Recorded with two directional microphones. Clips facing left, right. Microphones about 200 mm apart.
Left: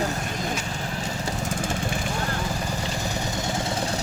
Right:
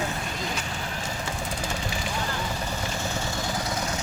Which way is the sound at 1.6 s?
50° left (ahead or behind).